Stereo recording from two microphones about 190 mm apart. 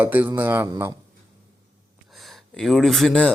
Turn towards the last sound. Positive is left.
turn(degrees=5)  # may be behind; listen again after turning